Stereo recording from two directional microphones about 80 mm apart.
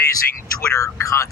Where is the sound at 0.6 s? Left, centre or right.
Left.